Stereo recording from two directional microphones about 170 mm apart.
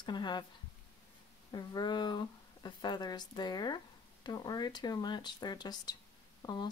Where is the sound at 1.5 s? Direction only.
25° left (ahead or behind).